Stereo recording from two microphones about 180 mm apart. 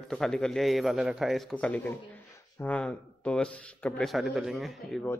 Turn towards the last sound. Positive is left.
turn(degrees=0)  # may be behind; listen again after turning